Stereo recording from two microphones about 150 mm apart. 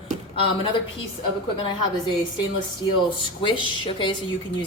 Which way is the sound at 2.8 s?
30° left (ahead or behind).